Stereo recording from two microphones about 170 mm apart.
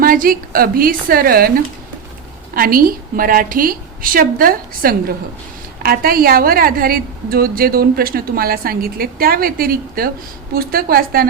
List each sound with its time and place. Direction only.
0.0 s a woman's voice: 55° right (ahead or behind)